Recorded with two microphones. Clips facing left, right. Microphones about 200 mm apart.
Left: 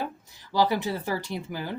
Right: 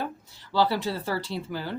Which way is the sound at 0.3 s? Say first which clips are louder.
Even; 15° left (ahead or behind).